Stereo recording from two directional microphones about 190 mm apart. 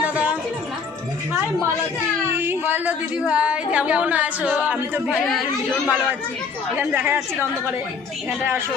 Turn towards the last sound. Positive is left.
turn(degrees=-10)  # may be behind; listen again after turning